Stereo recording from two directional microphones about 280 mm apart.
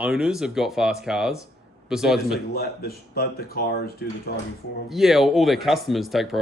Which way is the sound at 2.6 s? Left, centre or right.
Left.